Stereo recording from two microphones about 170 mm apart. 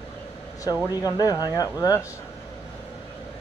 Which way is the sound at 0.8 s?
20° left (ahead or behind).